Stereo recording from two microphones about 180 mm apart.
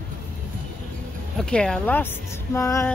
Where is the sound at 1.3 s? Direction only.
5° left (ahead or behind).